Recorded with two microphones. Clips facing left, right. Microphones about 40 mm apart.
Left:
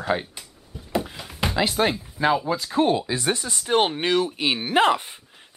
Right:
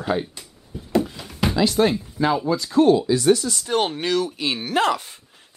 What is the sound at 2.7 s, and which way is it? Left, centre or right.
Speech, left.